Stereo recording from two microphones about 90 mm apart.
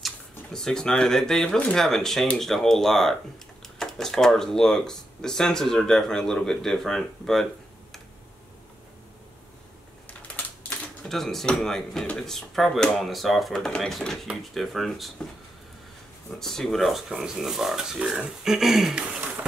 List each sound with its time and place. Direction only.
0.0 s speech: 5° left (ahead or behind)
10.3 s typewriter: 20° left (ahead or behind)
11.1 s speech: 5° left (ahead or behind)
16.3 s speech: 5° left (ahead or behind)